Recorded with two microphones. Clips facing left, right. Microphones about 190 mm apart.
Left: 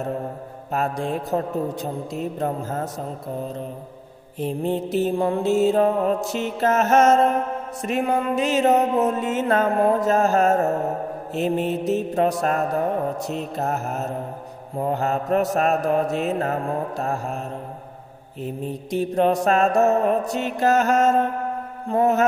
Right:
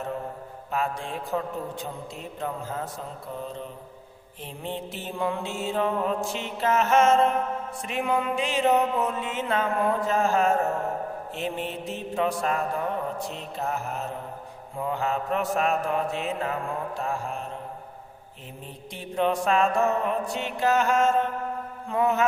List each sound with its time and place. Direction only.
0.7 s mantra: 40° left (ahead or behind)
18.4 s mantra: 40° left (ahead or behind)